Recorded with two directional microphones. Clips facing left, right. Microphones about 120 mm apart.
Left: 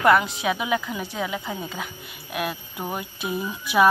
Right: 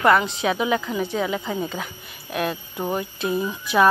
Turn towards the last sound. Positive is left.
turn(degrees=10)  # may be behind; listen again after turning